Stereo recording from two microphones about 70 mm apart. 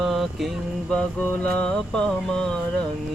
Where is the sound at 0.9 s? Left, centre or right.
Centre.